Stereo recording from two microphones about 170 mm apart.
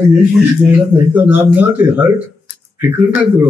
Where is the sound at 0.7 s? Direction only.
10° right (ahead or behind).